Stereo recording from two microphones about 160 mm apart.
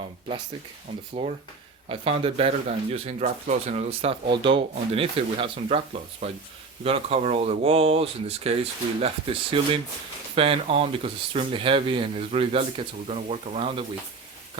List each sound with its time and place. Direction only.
1.2 s speech: 30° right (ahead or behind)